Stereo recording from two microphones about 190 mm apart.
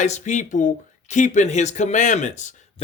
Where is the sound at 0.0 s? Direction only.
40° left (ahead or behind).